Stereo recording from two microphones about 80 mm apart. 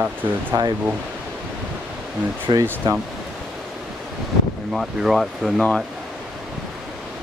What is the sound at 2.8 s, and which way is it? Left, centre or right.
Speech, right.